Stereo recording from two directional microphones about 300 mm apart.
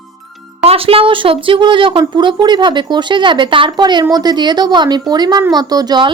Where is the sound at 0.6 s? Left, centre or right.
Centre.